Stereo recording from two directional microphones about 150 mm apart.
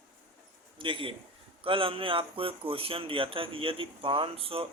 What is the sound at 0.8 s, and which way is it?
Speech, 35° right (ahead or behind).